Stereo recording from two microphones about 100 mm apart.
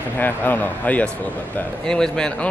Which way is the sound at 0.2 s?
20° left (ahead or behind).